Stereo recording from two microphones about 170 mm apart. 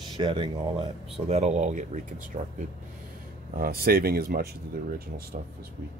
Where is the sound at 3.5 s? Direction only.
60° right (ahead or behind).